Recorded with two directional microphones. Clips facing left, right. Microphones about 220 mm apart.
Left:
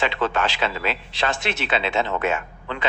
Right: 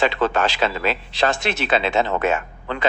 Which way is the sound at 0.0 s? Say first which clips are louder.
Right 4 dB; 40° right (ahead or behind).